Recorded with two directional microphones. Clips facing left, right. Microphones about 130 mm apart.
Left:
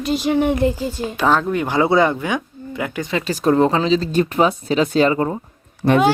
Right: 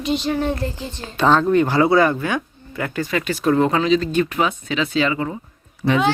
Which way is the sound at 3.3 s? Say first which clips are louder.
Left 3 dB; 35° left (ahead or behind).